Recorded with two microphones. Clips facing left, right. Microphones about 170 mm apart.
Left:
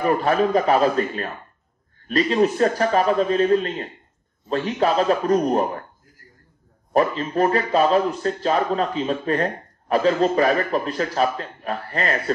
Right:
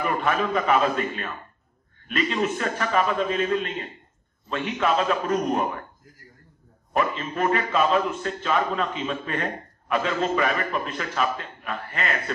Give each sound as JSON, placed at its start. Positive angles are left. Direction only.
{"t": 0.0, "sound": "a man's voice", "side_deg": 35}
{"t": 6.9, "sound": "a man's voice", "side_deg": 35}